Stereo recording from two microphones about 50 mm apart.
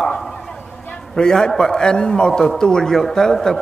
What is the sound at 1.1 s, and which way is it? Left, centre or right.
A man's voice, centre.